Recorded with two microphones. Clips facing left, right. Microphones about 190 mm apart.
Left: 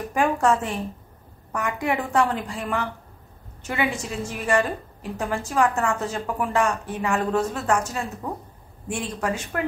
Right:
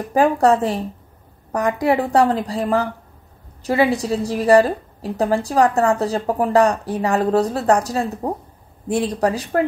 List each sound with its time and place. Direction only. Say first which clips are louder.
0.1 s a woman's voice: right 6 dB; 35° right (ahead or behind)